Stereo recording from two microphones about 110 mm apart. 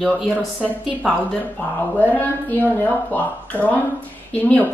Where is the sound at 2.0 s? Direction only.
15° left (ahead or behind).